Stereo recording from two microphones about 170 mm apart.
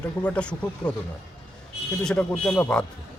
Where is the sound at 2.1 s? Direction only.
5° left (ahead or behind).